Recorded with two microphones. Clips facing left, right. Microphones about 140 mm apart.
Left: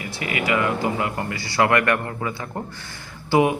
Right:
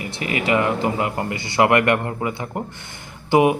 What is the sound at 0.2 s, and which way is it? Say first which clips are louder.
Speech: right 3 dB; 25° right (ahead or behind).